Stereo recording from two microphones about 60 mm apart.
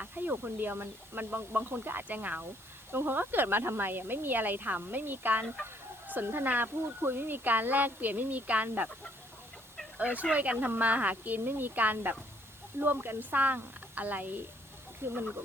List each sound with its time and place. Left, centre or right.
0.0 s speech: right
10.0 s a woman's voice: right
15.0 s speech: right